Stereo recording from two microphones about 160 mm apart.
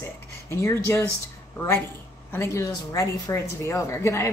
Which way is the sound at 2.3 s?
20° left (ahead or behind).